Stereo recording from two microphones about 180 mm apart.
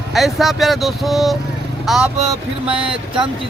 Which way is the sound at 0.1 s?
Centre (ahead or behind).